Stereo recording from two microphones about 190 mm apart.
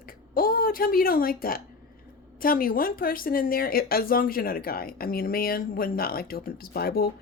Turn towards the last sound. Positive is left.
turn(degrees=55)  # may be behind; listen again after turning